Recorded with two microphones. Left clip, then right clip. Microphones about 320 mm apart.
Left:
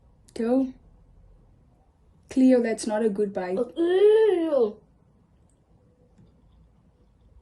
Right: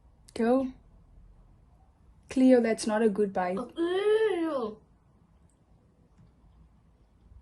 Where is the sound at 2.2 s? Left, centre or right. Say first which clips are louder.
Left 2 dB; centre.